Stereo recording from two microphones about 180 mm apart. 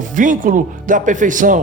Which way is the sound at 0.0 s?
45° right (ahead or behind).